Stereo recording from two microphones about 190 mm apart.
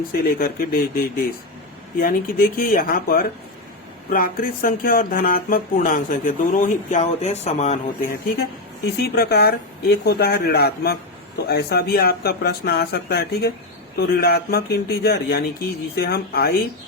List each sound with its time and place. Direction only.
0.1 s speech: 50° left (ahead or behind)
9.0 s speech: 55° left (ahead or behind)